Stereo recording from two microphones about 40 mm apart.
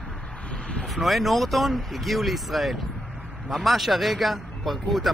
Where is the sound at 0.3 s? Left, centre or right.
Left.